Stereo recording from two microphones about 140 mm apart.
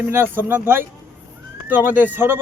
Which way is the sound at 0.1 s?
15° right (ahead or behind).